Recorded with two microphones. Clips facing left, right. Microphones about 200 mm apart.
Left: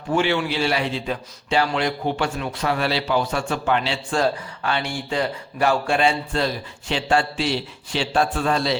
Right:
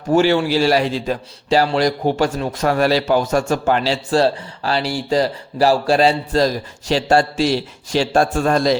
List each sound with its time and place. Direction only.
0.1 s speech: 40° right (ahead or behind)